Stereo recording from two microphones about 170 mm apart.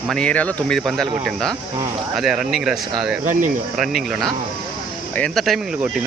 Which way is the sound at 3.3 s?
50° right (ahead or behind).